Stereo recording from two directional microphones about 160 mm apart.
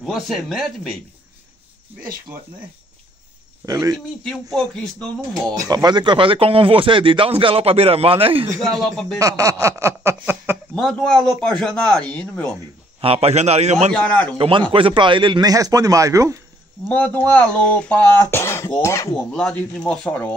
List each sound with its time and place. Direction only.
0.0 s speech: centre (ahead or behind)
3.6 s speech: 20° right (ahead or behind)
4.2 s speech: 5° left (ahead or behind)
5.5 s speech: 20° right (ahead or behind)
8.5 s speech: centre (ahead or behind)
9.2 s speech: 20° right (ahead or behind)
10.7 s speech: 5° left (ahead or behind)
13.0 s a man's voice: 40° right (ahead or behind)
13.9 s speech: 10° left (ahead or behind)
14.7 s speech: 30° right (ahead or behind)
16.8 s speech: 10° left (ahead or behind)
19.1 s speech: 5° left (ahead or behind)